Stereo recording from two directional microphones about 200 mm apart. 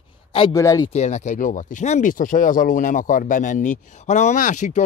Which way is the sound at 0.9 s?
35° left (ahead or behind).